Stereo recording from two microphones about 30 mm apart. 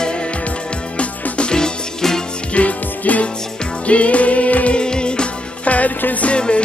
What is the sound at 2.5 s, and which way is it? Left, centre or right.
Music, left.